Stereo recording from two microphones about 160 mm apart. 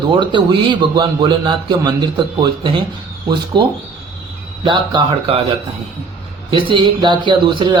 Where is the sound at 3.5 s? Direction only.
30° right (ahead or behind).